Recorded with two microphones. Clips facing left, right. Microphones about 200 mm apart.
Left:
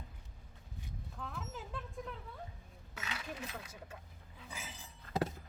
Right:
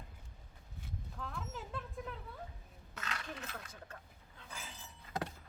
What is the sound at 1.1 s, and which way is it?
Dog, centre (ahead or behind).